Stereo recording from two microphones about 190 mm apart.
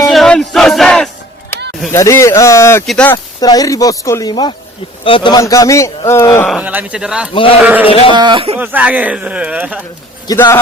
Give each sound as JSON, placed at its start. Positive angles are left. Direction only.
{"t": 0.1, "sound": "battle cry", "side_deg": 0}
{"t": 1.9, "sound": "a man's voice", "side_deg": 15}
{"t": 3.4, "sound": "a man's voice", "side_deg": 20}
{"t": 6.5, "sound": "speech", "side_deg": -10}
{"t": 7.9, "sound": "speech", "side_deg": 30}
{"t": 8.1, "sound": "speech", "side_deg": -25}
{"t": 8.5, "sound": "speech", "side_deg": -10}
{"t": 10.2, "sound": "a man's voice", "side_deg": 15}